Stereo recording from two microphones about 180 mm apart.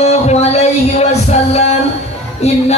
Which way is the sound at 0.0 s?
35° left (ahead or behind).